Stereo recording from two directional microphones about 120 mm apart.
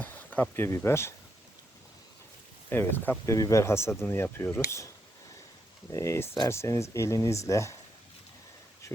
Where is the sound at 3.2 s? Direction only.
25° left (ahead or behind).